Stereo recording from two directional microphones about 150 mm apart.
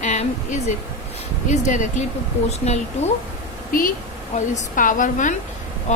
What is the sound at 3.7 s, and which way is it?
A woman's voice, 70° left (ahead or behind).